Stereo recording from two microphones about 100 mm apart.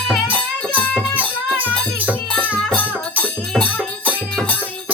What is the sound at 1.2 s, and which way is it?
Music, 15° right (ahead or behind).